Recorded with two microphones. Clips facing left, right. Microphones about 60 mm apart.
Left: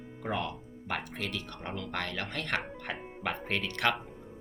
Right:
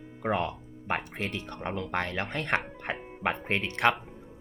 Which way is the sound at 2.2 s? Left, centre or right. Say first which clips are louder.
Right 4 dB; centre.